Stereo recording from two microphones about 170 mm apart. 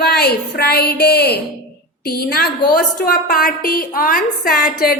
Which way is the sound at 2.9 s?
60° left (ahead or behind).